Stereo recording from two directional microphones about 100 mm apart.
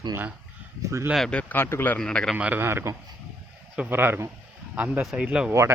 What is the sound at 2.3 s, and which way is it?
Speech, 15° right (ahead or behind).